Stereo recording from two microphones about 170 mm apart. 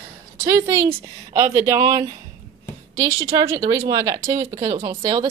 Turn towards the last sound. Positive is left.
turn(degrees=-25)  # may be behind; listen again after turning